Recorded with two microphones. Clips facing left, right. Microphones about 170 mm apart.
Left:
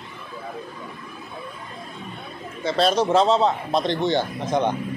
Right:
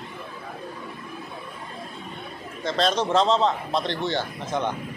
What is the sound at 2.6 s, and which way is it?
A man's voice, 5° left (ahead or behind).